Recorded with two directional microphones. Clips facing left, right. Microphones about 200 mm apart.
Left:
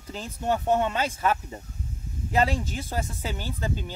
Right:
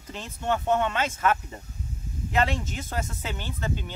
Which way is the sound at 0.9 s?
35° left (ahead or behind).